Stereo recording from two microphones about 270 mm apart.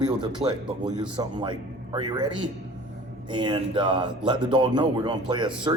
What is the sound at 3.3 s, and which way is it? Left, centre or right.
Speech, centre.